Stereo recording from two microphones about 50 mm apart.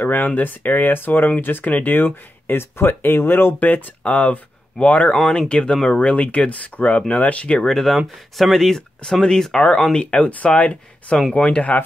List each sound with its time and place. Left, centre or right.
0.0 s speech: left
3.5 s speech: left; by 7.7 s centre
7.7 s speech: centre; by 11.7 s left